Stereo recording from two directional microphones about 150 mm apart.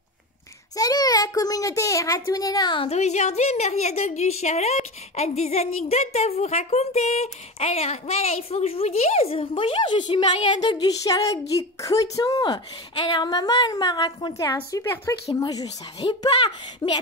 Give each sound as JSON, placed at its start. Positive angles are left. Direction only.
{"t": 0.7, "sound": "a child's voice", "side_deg": 25}
{"t": 2.9, "sound": "a woman's voice", "side_deg": 50}